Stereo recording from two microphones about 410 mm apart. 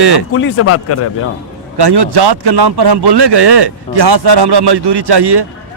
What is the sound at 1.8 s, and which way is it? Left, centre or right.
Speech, right.